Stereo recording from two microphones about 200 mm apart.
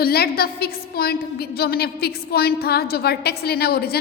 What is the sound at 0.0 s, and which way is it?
A woman's voice, 50° left (ahead or behind).